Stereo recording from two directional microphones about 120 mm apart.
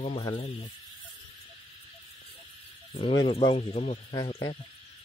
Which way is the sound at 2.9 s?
50° left (ahead or behind).